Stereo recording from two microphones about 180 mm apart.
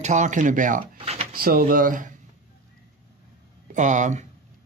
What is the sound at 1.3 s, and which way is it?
Speech, 55° right (ahead or behind).